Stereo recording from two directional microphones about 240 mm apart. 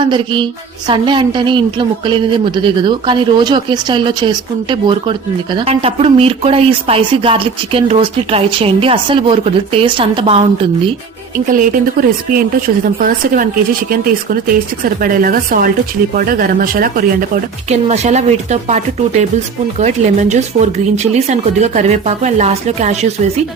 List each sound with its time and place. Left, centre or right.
0.0 s speech: centre
11.5 s a woman's voice: right